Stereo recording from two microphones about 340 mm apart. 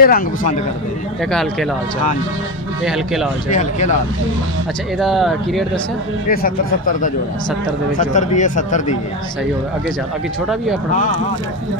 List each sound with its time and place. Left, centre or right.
0.0 s speech: left
1.3 s speech: centre
2.8 s speech: centre
3.4 s speech: left
4.9 s speech: centre
6.3 s speech: left